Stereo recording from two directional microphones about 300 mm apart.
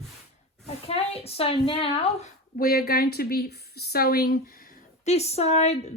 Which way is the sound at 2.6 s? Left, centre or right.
Left.